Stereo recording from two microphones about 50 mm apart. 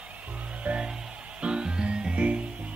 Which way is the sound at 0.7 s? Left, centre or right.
Centre.